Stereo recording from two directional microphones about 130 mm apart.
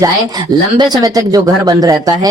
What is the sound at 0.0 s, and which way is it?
Speech, 30° right (ahead or behind).